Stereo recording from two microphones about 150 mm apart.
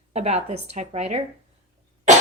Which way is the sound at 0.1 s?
45° right (ahead or behind).